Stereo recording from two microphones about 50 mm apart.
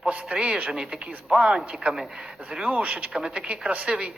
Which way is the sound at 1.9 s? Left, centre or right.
Centre.